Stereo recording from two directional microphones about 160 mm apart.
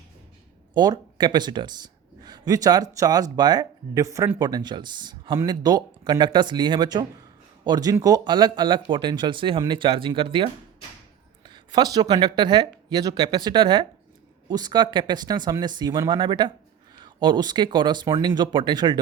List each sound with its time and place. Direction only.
0.7 s speech: 25° right (ahead or behind)